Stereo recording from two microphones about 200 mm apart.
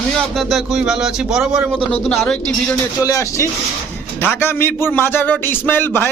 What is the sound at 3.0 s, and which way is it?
A man's voice, 15° left (ahead or behind).